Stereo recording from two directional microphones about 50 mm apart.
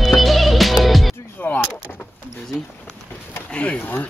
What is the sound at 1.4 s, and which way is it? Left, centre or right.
Vehicle, left.